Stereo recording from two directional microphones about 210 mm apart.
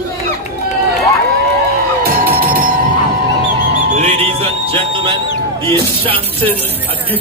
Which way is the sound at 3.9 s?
30° right (ahead or behind).